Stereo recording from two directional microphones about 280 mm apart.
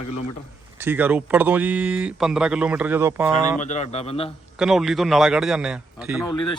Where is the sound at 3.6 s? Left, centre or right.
Left.